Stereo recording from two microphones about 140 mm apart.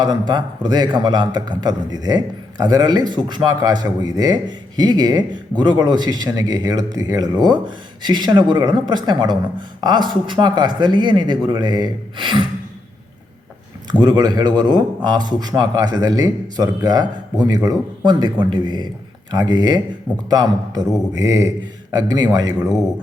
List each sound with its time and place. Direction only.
0.0 s speech: 30° right (ahead or behind)
14.0 s a man's voice: 30° right (ahead or behind)